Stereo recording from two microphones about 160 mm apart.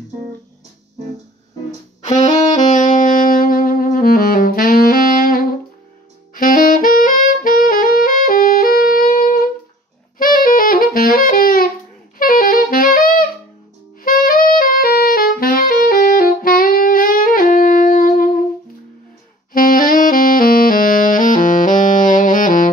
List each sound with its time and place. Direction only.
2.0 s saxophone: 45° left (ahead or behind); by 18.4 s 60° left (ahead or behind)
19.5 s saxophone: 60° left (ahead or behind)